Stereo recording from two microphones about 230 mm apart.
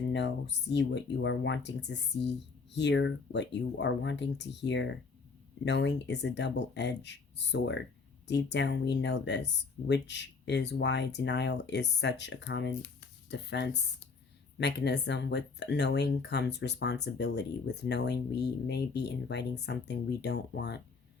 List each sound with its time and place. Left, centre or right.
0.1 s speech: left